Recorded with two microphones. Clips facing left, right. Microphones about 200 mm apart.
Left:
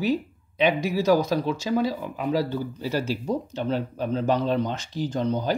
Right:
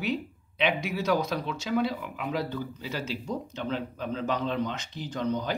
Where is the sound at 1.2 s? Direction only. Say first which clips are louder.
Left 6 dB; 35° left (ahead or behind).